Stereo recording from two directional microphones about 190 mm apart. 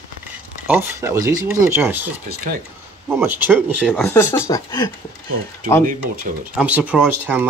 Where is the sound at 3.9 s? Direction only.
10° left (ahead or behind).